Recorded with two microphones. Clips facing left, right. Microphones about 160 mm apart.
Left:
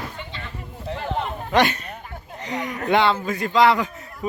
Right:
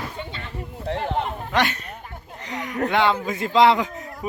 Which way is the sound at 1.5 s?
20° left (ahead or behind).